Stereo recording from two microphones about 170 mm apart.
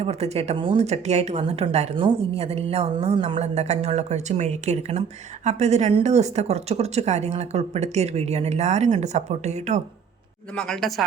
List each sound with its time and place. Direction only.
0.0 s speech: 40° right (ahead or behind)
10.5 s speech: 5° left (ahead or behind)